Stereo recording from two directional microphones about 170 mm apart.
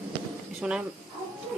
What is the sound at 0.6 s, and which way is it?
Speech, 5° right (ahead or behind).